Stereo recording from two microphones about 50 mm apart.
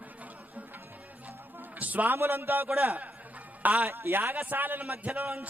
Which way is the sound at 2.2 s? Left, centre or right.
Right.